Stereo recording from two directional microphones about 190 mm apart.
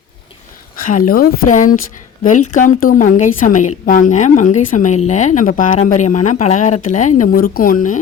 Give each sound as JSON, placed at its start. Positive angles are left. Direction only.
{"t": 0.9, "sound": "a woman's voice", "side_deg": 45}